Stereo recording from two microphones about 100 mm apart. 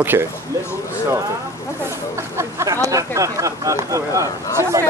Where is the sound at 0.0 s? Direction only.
20° right (ahead or behind).